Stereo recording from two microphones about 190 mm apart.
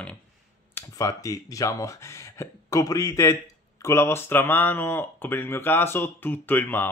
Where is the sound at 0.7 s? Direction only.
15° left (ahead or behind).